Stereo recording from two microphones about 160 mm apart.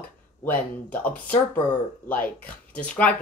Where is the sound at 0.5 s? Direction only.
10° left (ahead or behind).